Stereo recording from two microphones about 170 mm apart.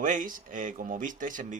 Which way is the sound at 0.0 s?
50° right (ahead or behind).